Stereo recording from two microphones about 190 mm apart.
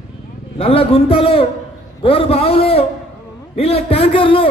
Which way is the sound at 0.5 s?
30° left (ahead or behind).